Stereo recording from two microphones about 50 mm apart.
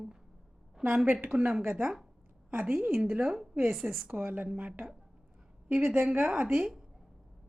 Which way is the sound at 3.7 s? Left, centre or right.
Centre.